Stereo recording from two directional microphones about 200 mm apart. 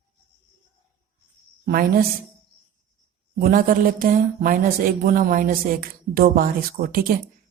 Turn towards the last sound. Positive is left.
turn(degrees=-45)  # may be behind; listen again after turning